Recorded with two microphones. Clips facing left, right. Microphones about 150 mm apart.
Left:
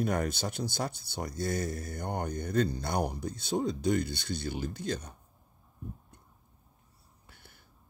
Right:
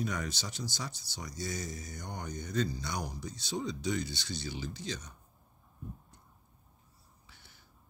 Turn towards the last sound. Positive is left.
turn(degrees=55)  # may be behind; listen again after turning